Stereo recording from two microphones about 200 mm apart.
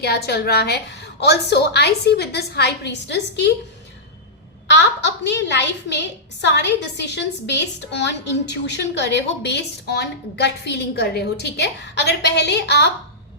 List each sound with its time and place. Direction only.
0.0 s a woman's voice: 55° left (ahead or behind)
4.7 s a woman's voice: 60° left (ahead or behind)